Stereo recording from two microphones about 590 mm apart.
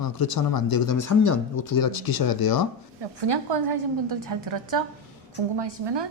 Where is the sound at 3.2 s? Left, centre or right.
Right.